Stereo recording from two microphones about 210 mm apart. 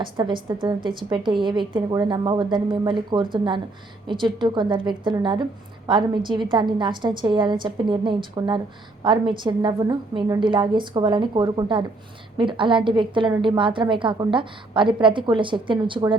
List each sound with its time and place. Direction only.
0.0 s a woman's voice: 20° right (ahead or behind)